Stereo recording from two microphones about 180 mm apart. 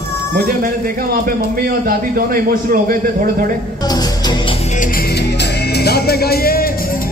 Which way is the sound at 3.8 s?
20° left (ahead or behind).